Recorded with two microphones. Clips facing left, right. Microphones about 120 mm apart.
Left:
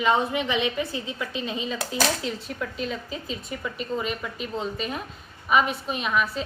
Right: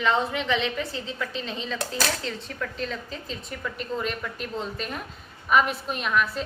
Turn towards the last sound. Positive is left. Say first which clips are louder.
# even
turn(degrees=0)  # may be behind; listen again after turning